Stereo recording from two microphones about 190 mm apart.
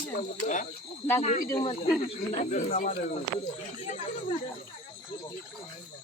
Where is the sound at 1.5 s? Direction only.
30° left (ahead or behind).